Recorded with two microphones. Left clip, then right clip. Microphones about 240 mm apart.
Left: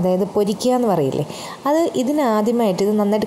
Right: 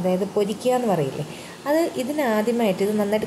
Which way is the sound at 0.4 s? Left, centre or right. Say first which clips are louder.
Left 2 dB; left.